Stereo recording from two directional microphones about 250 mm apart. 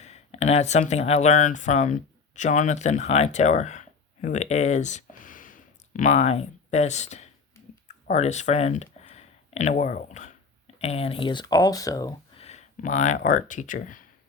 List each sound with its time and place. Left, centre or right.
0.0 s speech: left
12.5 s speech: left